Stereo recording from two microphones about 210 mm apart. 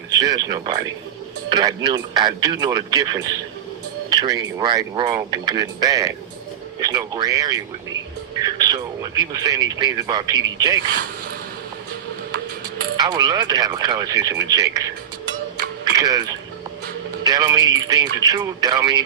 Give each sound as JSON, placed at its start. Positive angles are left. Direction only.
{"t": 0.2, "sound": "speech", "side_deg": -20}
{"t": 4.1, "sound": "speech", "side_deg": -20}
{"t": 13.1, "sound": "speech", "side_deg": -20}
{"t": 15.9, "sound": "speech", "side_deg": -20}